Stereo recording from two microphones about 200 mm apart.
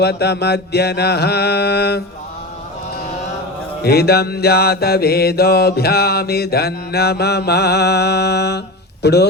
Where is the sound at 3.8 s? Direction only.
55° left (ahead or behind).